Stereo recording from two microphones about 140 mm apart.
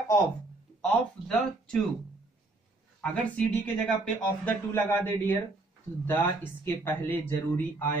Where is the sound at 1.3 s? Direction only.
5° left (ahead or behind).